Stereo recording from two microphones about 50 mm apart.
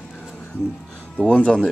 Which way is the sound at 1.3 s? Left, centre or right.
Centre.